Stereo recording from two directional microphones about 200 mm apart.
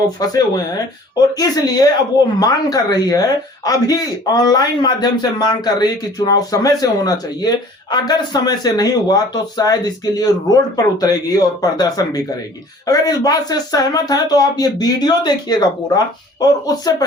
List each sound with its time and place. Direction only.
0.2 s speech: 20° left (ahead or behind)